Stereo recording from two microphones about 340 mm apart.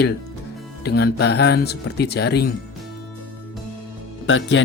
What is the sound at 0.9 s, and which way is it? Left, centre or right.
Speech, left.